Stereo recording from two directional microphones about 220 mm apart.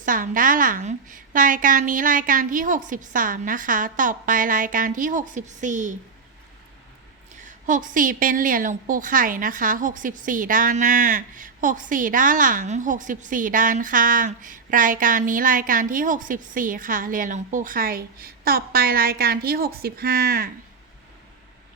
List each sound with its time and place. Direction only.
0.0 s a woman's voice: 40° right (ahead or behind)
7.4 s a woman's voice: 35° right (ahead or behind)